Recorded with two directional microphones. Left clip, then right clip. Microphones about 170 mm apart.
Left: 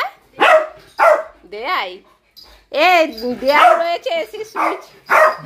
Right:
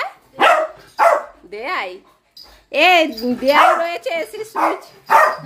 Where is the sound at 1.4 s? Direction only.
10° right (ahead or behind).